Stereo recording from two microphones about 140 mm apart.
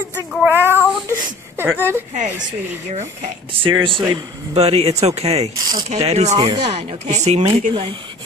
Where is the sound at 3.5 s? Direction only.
35° right (ahead or behind).